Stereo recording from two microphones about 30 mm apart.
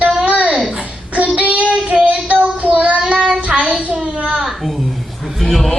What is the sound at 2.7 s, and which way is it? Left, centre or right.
Child singing, right.